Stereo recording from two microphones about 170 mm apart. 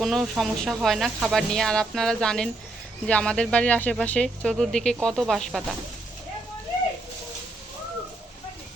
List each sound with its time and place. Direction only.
0.0 s speech: centre (ahead or behind)